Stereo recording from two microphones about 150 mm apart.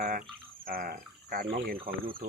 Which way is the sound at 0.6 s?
75° right (ahead or behind).